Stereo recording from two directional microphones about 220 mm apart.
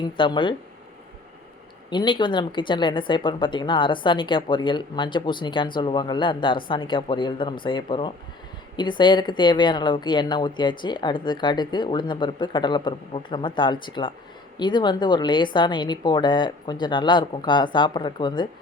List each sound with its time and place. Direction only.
0.0 s speech: 20° left (ahead or behind)
1.9 s speech: 20° left (ahead or behind)